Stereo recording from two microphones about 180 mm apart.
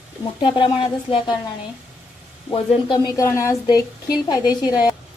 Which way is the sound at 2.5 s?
25° left (ahead or behind).